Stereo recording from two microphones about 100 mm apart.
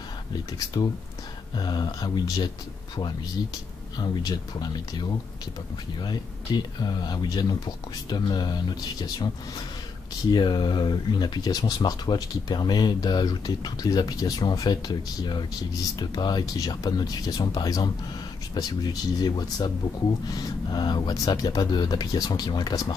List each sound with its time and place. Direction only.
0.7 s speech: 40° left (ahead or behind)
4.0 s speech: 40° left (ahead or behind)
10.3 s speech: 45° left (ahead or behind)